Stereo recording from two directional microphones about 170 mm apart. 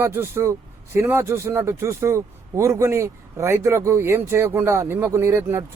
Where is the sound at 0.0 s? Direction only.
15° right (ahead or behind).